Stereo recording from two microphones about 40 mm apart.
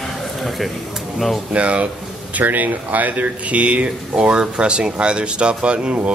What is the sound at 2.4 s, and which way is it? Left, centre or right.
Speech, right.